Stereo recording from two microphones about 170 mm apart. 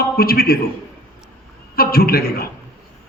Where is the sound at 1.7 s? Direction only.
60° left (ahead or behind).